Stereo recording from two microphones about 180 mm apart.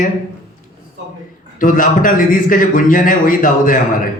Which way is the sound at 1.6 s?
50° left (ahead or behind).